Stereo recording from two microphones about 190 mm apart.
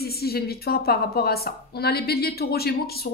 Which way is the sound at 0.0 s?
55° left (ahead or behind).